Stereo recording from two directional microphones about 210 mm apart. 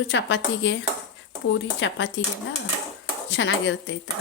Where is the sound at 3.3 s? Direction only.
60° left (ahead or behind).